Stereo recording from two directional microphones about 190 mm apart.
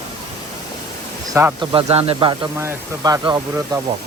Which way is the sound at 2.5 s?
15° right (ahead or behind).